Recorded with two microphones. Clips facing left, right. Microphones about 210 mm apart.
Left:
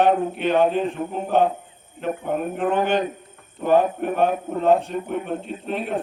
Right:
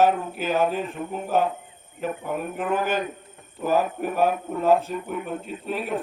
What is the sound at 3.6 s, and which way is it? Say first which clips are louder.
A man's voice: left 4 dB; 5° right (ahead or behind).